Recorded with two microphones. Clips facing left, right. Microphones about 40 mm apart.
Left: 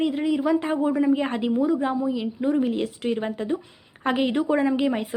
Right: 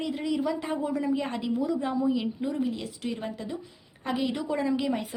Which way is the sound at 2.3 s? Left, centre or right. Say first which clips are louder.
Left 7 dB; left.